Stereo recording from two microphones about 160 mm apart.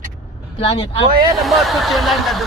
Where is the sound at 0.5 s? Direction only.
40° left (ahead or behind).